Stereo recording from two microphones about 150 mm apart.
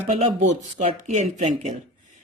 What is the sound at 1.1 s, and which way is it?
Speech, 55° right (ahead or behind).